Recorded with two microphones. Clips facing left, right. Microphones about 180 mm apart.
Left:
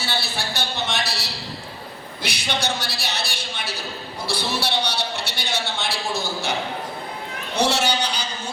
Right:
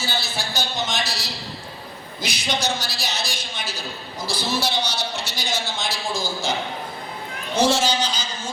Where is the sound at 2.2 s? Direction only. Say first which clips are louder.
Right 1 dB; 60° left (ahead or behind).